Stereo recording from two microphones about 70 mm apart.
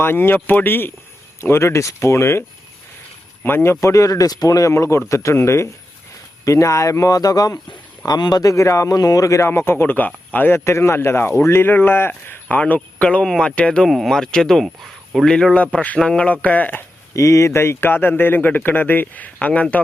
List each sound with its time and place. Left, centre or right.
0.0 s speech: left
1.4 s speech: left
3.4 s speech: left
6.4 s speech: left
8.0 s speech: left
9.5 s speech: left
10.6 s speech: left
12.5 s speech: left
13.8 s speech: centre; by 16.8 s left
17.2 s speech: left